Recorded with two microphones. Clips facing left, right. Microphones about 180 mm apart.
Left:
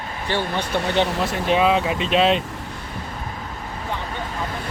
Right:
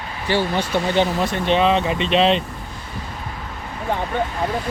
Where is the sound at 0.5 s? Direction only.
Centre (ahead or behind).